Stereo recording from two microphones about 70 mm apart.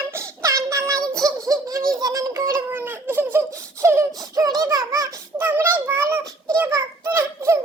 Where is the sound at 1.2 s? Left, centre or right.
Right.